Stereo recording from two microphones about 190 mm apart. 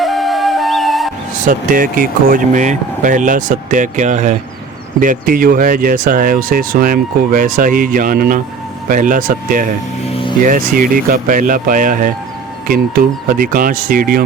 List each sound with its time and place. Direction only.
0.0 s flute: centre (ahead or behind)
1.5 s speech: 45° right (ahead or behind)